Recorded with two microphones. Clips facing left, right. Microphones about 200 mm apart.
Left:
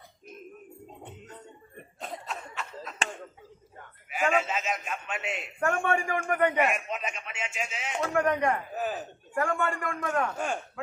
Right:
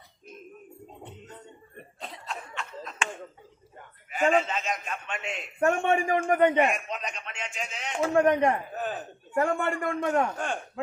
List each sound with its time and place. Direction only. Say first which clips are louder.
2.2 s cough: even; 5° left (ahead or behind)
4.1 s a sound: right 3 dB; 5° left (ahead or behind)
5.5 s a man's voice: right 4 dB; 25° right (ahead or behind)
6.7 s a man's voice: even; 5° left (ahead or behind)
8.1 s a man's voice: right 4 dB; 25° right (ahead or behind)
8.7 s a man's voice: left 1 dB; 5° left (ahead or behind)
9.3 s a man's voice: right 3 dB; 25° right (ahead or behind)
10.3 s speech: even; 5° left (ahead or behind)